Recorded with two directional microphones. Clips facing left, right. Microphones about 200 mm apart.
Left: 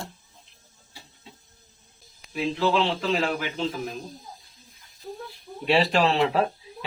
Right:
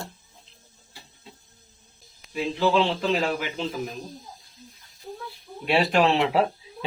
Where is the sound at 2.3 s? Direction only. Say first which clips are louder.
Right 1 dB; centre (ahead or behind).